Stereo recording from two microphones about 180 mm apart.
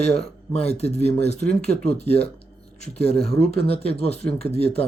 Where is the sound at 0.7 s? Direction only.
35° left (ahead or behind).